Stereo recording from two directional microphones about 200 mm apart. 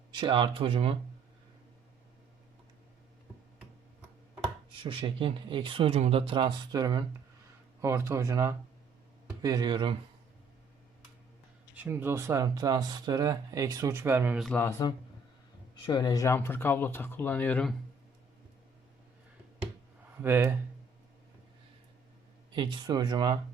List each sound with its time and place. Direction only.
0.1 s speech: 25° right (ahead or behind)
4.7 s speech: 25° right (ahead or behind)
11.8 s speech: 10° right (ahead or behind)
14.4 s speech: 10° left (ahead or behind)
20.2 s speech: 10° right (ahead or behind)
22.5 s speech: 25° right (ahead or behind)